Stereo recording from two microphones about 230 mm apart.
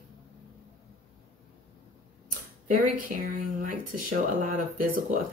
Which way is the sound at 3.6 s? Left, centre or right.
Right.